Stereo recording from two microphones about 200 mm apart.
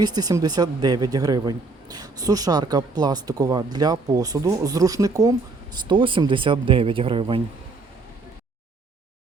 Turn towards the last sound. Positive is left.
turn(degrees=-25)  # may be behind; listen again after turning